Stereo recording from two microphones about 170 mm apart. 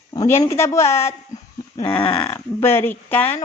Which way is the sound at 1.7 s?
30° left (ahead or behind).